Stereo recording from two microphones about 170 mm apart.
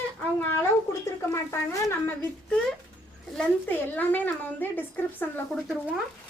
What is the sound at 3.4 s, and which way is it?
A woman's voice, 10° left (ahead or behind).